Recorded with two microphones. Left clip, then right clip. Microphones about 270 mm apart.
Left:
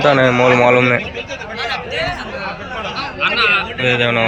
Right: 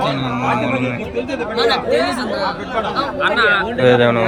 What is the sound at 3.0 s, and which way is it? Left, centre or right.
Speech, centre.